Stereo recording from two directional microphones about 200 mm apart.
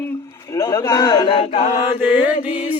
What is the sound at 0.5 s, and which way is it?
Speech, 15° left (ahead or behind).